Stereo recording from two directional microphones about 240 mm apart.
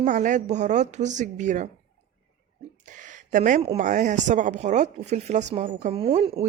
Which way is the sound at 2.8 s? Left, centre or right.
Right.